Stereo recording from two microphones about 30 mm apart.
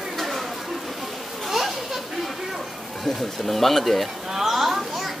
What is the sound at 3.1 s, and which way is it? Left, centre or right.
Speech, centre.